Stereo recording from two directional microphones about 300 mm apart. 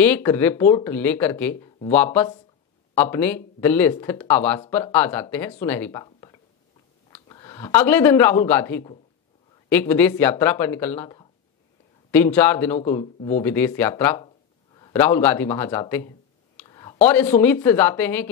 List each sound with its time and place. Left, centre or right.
0.0 s speech: centre
13.0 s speech: centre
13.4 s speech: centre
16.5 s a sound: centre
17.4 s speech: centre